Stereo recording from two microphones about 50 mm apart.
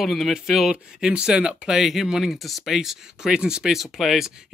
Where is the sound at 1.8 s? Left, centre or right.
Centre.